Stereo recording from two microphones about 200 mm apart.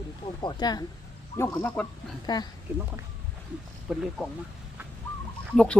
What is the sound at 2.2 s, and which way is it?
Speech, 20° left (ahead or behind).